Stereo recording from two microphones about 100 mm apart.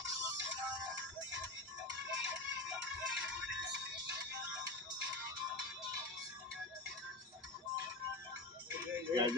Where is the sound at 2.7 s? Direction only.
10° right (ahead or behind).